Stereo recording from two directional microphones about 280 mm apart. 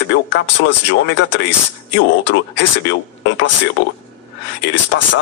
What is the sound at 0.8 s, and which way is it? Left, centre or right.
Speech, left.